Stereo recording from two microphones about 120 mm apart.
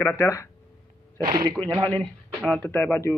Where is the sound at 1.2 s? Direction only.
40° right (ahead or behind).